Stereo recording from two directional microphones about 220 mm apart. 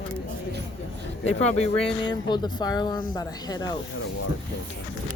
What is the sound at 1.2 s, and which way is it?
Speech, 30° left (ahead or behind).